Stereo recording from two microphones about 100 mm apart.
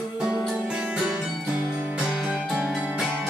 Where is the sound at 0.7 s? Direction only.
10° right (ahead or behind).